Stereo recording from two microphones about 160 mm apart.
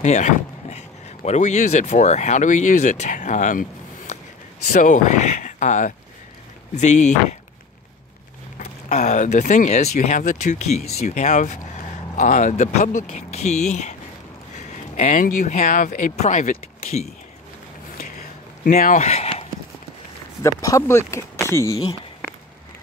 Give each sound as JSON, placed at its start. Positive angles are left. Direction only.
{"t": 0.0, "sound": "speech", "side_deg": 45}
{"t": 8.5, "sound": "speech", "side_deg": 50}
{"t": 18.8, "sound": "speech", "side_deg": 50}
{"t": 20.4, "sound": "speech", "side_deg": 20}